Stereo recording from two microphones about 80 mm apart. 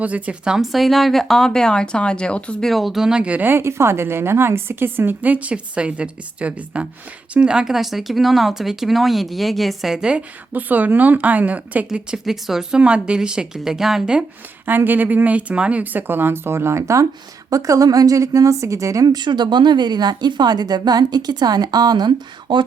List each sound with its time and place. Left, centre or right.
0.0 s speech: centre
2.6 s speech: centre
10.5 s speech: right
11.9 s a woman's voice: centre
14.7 s a woman's voice: right
19.0 s speech: right